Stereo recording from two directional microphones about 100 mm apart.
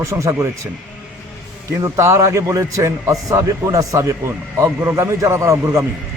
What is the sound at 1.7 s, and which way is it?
A man's voice, 30° right (ahead or behind).